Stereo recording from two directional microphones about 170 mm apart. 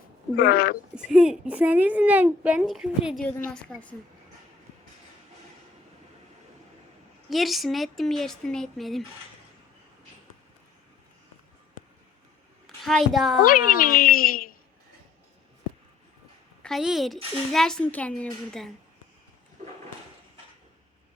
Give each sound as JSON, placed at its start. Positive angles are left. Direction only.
{"t": 0.3, "sound": "speech", "side_deg": 70}
{"t": 0.9, "sound": "a woman's voice", "side_deg": -5}
{"t": 3.2, "sound": "a woman's voice", "side_deg": 10}
{"t": 7.3, "sound": "a woman's voice", "side_deg": 0}
{"t": 12.6, "sound": "a child's voice", "side_deg": 0}
{"t": 13.4, "sound": "speech", "side_deg": 55}
{"t": 16.6, "sound": "a woman's voice", "side_deg": 0}